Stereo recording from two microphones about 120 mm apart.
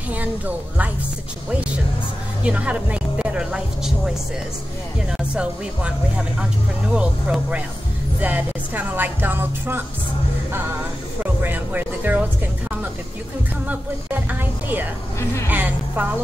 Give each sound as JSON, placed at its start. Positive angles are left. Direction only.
{"t": 2.4, "sound": "speech", "side_deg": -10}
{"t": 5.3, "sound": "speech", "side_deg": -10}
{"t": 11.4, "sound": "speech", "side_deg": -15}
{"t": 13.7, "sound": "speech", "side_deg": -15}